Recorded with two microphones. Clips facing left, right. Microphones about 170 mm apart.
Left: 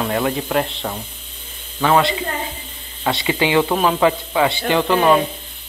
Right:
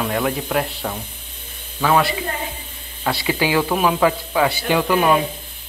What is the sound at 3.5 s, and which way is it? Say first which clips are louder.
Speech: left 2 dB; 5° right (ahead or behind).